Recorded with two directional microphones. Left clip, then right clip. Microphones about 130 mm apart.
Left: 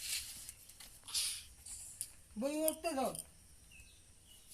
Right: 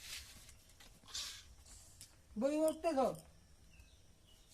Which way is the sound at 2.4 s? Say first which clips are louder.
Right 2 dB; 35° right (ahead or behind).